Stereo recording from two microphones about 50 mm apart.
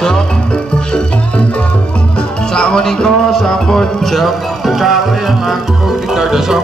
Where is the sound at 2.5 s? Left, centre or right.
Centre.